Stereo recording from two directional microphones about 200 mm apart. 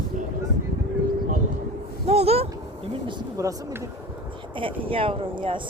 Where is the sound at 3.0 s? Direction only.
15° right (ahead or behind).